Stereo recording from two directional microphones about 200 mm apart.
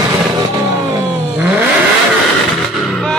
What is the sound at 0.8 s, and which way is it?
Vehicle, 15° right (ahead or behind).